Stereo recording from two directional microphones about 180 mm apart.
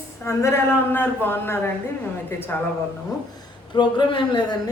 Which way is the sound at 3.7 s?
25° left (ahead or behind).